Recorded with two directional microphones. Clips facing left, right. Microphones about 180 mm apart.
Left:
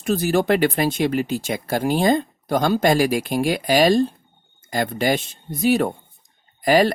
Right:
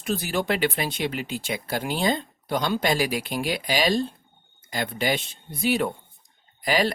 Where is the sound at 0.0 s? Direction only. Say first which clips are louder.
Left 7 dB; 45° left (ahead or behind).